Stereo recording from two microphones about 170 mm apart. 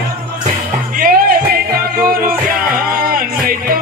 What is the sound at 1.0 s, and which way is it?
Music, 55° right (ahead or behind).